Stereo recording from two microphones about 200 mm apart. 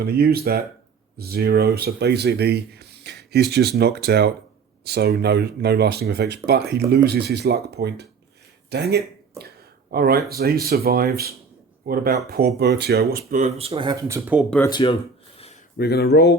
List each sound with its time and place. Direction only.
0.0 s speech: 50° right (ahead or behind)
13.4 s speech: 30° right (ahead or behind); by 14.4 s 10° right (ahead or behind)
14.7 s speech: 25° left (ahead or behind)
15.8 s speech: 55° left (ahead or behind)